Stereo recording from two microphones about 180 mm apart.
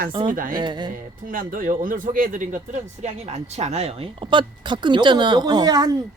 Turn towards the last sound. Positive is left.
turn(degrees=-25)  # may be behind; listen again after turning